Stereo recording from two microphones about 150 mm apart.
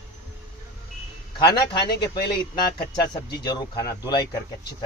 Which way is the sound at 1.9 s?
90° left.